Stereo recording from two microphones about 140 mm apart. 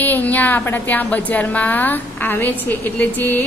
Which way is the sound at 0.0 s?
10° left (ahead or behind).